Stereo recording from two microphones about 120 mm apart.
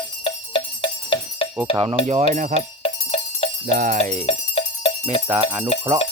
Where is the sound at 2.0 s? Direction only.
75° right (ahead or behind).